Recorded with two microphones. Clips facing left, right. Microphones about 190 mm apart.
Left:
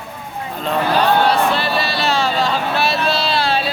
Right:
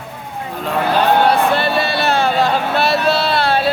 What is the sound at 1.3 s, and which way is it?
Vehicle, 55° right (ahead or behind).